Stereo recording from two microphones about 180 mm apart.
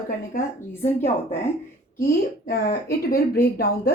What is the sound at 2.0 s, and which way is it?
A woman's voice, 55° left (ahead or behind).